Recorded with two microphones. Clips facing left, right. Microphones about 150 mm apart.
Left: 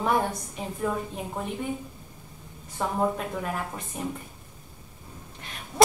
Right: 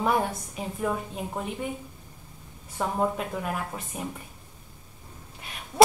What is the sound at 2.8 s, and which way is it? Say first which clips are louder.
A woman's voice: even; 5° right (ahead or behind).